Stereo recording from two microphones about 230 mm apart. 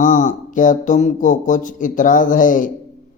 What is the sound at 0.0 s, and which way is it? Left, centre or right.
Speech, left.